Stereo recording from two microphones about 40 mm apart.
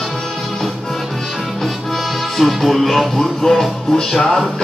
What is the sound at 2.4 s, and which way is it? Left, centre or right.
Music, centre.